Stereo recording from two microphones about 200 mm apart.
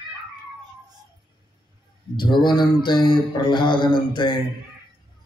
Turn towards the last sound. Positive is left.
turn(degrees=25)  # may be behind; listen again after turning